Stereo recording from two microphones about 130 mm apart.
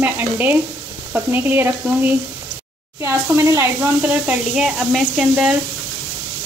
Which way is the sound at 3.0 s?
20° right (ahead or behind).